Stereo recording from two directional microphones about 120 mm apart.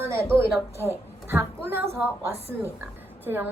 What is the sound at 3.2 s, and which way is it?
Speech, 15° right (ahead or behind).